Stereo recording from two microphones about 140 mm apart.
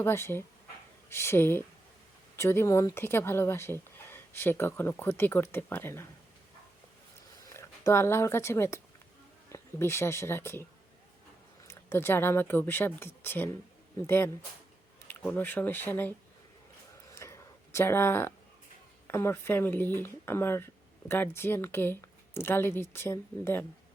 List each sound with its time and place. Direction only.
0.0 s speech: 15° left (ahead or behind)
7.5 s speech: 20° left (ahead or behind)
11.7 s speech: 15° left (ahead or behind)
15.0 s speech: 10° left (ahead or behind)
17.2 s a sound: 20° left (ahead or behind)
19.0 s speech: 20° left (ahead or behind)